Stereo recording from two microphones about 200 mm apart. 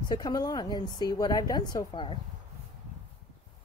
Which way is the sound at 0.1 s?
20° left (ahead or behind).